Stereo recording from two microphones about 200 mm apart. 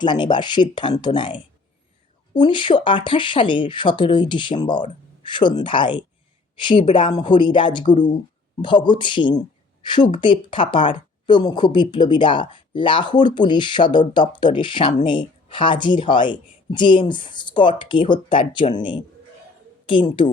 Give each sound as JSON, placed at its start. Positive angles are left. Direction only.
{"t": 0.0, "sound": "speech", "side_deg": 20}